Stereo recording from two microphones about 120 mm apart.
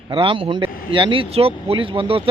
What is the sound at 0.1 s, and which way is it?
Speech, 45° right (ahead or behind).